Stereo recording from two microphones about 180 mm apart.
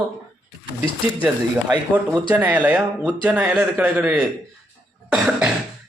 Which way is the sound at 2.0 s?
10° right (ahead or behind).